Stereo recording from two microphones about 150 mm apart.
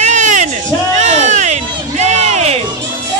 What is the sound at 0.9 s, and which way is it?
Music, 55° right (ahead or behind).